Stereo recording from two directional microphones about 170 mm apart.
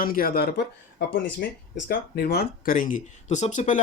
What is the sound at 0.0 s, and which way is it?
Speech, 55° left (ahead or behind).